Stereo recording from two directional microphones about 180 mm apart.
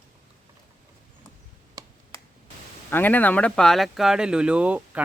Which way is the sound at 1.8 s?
20° right (ahead or behind).